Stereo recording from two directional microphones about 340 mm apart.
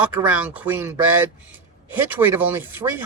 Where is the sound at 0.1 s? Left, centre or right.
Centre.